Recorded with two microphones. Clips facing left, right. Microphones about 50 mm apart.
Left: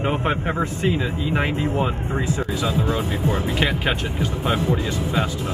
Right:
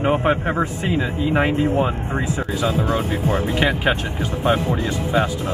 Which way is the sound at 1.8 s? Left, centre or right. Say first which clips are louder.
Right 2 dB; right.